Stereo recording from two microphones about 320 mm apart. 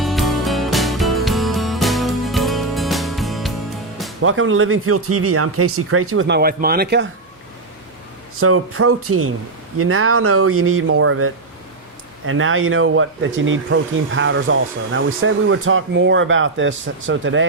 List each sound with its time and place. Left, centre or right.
0.0 s music: centre
4.2 s speech: right
8.4 s speech: right